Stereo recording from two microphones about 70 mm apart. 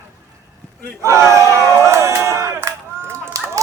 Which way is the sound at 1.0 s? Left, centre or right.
Right.